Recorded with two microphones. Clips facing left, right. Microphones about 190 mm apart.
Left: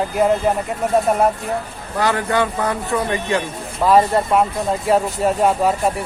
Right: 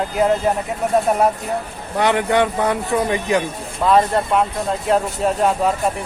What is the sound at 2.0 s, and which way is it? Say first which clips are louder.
Speech: right 2 dB; 20° right (ahead or behind).